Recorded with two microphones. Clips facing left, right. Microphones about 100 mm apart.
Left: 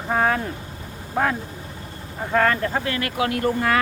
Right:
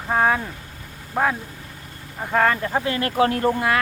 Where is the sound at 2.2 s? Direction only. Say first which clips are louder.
Even; 10° right (ahead or behind).